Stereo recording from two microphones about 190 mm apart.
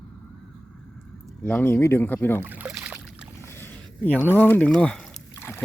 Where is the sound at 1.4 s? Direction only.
10° left (ahead or behind).